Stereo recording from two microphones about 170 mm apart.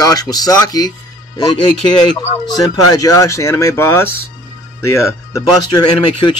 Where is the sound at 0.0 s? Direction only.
20° left (ahead or behind).